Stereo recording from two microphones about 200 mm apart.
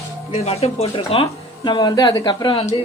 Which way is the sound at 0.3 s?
30° left (ahead or behind).